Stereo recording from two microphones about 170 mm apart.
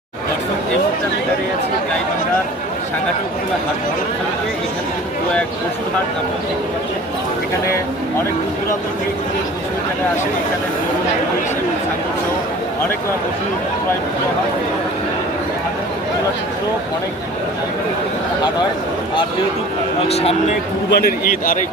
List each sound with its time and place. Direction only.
20.1 s speech: 35° left (ahead or behind)
20.9 s a man's voice: 60° left (ahead or behind)